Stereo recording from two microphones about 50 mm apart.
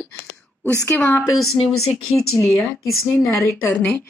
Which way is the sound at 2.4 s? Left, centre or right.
Left.